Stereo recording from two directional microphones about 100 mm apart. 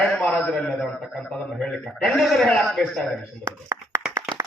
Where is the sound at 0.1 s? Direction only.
15° left (ahead or behind).